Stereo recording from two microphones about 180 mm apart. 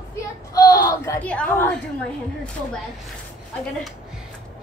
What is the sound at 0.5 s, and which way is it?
A woman's voice, 20° left (ahead or behind).